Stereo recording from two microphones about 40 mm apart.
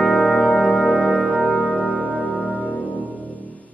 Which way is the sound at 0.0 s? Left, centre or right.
Centre.